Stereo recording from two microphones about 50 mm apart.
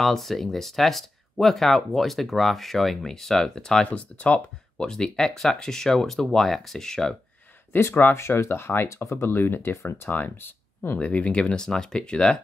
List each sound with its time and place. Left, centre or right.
0.0 s speech: centre
3.8 s speech: left
4.8 s speech: centre
7.7 s speech: left
8.2 s speech: left
8.8 s speech: left
9.1 s speech: left
10.0 s speech: left
11.0 s speech: left